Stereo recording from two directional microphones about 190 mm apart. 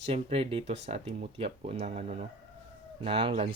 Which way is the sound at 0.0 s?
30° right (ahead or behind).